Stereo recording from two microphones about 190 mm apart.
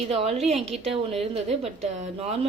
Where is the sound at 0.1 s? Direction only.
30° right (ahead or behind).